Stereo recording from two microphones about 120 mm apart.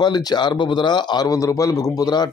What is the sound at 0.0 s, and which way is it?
A man's voice, 35° left (ahead or behind).